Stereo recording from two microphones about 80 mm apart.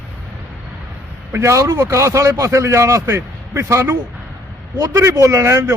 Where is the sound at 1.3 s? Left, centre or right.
Right.